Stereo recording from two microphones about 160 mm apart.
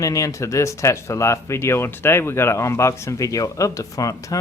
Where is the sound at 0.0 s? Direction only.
20° left (ahead or behind).